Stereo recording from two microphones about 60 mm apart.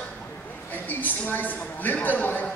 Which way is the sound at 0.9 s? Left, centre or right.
Left.